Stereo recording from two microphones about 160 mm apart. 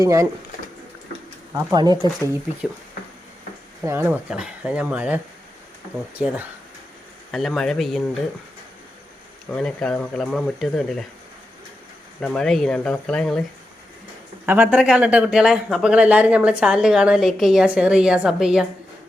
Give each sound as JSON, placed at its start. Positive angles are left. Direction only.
{"t": 0.0, "sound": "speech", "side_deg": -20}
{"t": 1.5, "sound": "speech", "side_deg": -25}
{"t": 3.8, "sound": "speech", "side_deg": -10}
{"t": 7.3, "sound": "speech", "side_deg": 5}
{"t": 9.5, "sound": "speech", "side_deg": 5}
{"t": 12.2, "sound": "speech", "side_deg": 5}
{"t": 14.4, "sound": "speech", "side_deg": -10}